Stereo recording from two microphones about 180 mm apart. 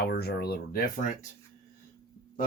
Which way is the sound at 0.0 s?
60° left (ahead or behind).